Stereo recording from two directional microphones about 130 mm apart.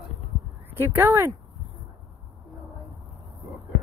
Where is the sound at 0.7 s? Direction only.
15° right (ahead or behind).